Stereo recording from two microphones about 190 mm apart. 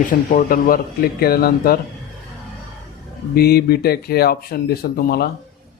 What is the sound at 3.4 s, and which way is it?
Speech, 55° left (ahead or behind).